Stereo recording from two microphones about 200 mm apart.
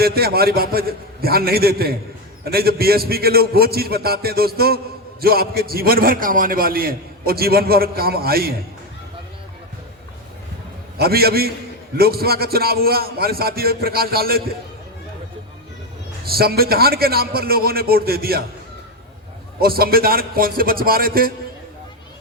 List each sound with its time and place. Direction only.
0.0 s a man's voice: 50° right (ahead or behind)
10.9 s a man's voice: 50° right (ahead or behind)
16.2 s a man's voice: 50° right (ahead or behind)
19.5 s a man's voice: 50° right (ahead or behind)